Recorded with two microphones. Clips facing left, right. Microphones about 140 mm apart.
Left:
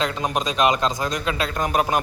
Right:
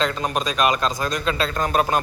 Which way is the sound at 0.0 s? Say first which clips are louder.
Right 1 dB; 15° left (ahead or behind).